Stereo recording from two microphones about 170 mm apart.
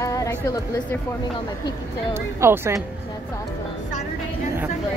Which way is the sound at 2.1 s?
15° right (ahead or behind).